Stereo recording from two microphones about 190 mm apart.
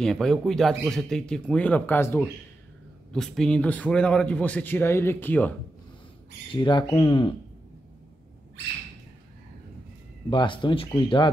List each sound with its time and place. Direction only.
0.0 s a man's voice: centre (ahead or behind)
6.5 s speech: 25° left (ahead or behind)
10.3 s speech: 25° left (ahead or behind)